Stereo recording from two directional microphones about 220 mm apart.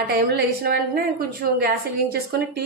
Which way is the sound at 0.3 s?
45° right (ahead or behind).